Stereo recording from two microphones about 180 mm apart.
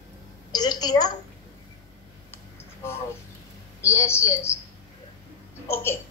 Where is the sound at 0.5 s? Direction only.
20° left (ahead or behind).